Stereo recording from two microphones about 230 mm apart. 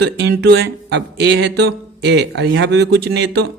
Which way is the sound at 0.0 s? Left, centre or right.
Right.